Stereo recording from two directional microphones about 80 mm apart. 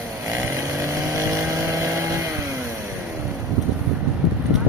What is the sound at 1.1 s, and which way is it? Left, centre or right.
Vehicle, right.